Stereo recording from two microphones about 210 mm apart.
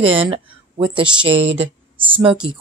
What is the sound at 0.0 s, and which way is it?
Speech, 25° right (ahead or behind).